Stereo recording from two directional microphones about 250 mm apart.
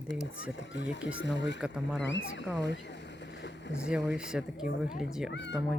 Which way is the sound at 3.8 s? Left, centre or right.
Centre.